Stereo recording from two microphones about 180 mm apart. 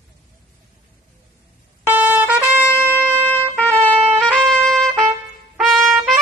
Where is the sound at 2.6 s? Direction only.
10° left (ahead or behind).